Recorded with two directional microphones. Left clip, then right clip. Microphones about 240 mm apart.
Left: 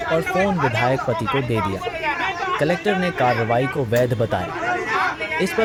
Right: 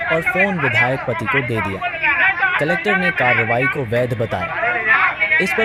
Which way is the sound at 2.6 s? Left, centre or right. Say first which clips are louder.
Right 3 dB; centre.